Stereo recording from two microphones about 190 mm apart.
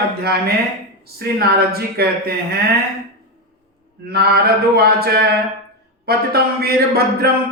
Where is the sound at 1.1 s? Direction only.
55° right (ahead or behind).